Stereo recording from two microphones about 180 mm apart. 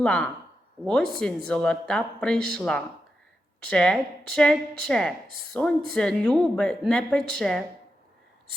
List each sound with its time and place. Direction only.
0.0 s speech: 5° left (ahead or behind)